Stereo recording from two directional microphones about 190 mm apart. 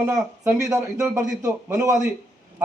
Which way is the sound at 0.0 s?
10° right (ahead or behind).